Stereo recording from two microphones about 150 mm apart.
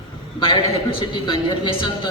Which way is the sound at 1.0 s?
35° left (ahead or behind).